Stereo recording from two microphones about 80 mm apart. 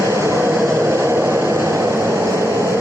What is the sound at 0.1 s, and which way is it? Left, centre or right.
Vehicle, right.